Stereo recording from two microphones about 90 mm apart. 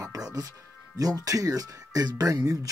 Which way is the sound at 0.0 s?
40° right (ahead or behind).